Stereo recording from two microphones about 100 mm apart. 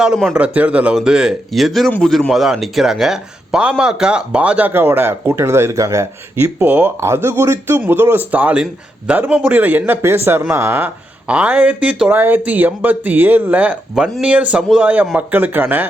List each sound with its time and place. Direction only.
0.0 s speech: 5° right (ahead or behind)
0.3 s speech: 15° right (ahead or behind)